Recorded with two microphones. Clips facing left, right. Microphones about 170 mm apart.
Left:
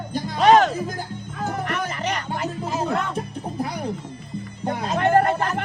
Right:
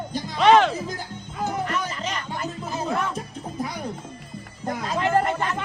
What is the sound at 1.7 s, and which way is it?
Music, 60° left (ahead or behind).